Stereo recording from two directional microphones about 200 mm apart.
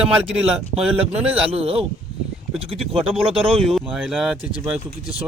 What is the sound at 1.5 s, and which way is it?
Speech, 30° right (ahead or behind).